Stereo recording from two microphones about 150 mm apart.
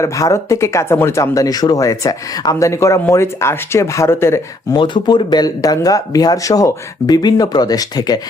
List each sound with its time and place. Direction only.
0.0 s speech: 20° left (ahead or behind)
4.7 s speech: 30° left (ahead or behind)